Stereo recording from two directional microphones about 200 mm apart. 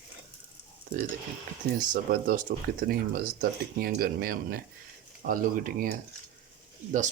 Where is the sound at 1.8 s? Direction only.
40° right (ahead or behind).